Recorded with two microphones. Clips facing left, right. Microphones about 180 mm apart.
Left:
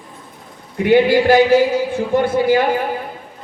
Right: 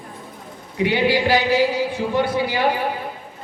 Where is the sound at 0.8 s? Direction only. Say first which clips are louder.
Left 6 dB; 50° left (ahead or behind).